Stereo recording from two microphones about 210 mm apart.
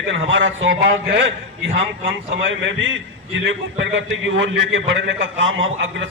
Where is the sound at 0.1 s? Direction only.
60° right (ahead or behind).